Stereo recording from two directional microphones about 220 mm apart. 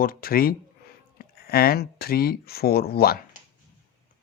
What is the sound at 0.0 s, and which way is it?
Speech, 40° left (ahead or behind).